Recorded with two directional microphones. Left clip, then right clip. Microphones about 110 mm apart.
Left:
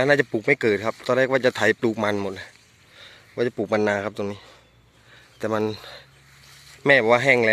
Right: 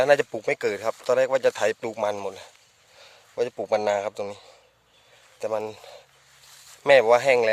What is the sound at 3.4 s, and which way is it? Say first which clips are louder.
A man's voice: left 2 dB; 30° right (ahead or behind).